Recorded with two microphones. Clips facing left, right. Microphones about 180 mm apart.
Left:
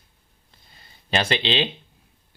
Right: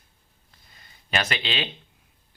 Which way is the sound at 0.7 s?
30° left (ahead or behind).